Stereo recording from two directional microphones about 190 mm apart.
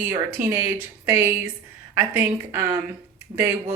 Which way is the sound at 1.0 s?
15° right (ahead or behind).